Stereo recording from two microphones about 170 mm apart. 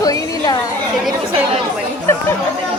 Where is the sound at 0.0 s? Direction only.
20° left (ahead or behind).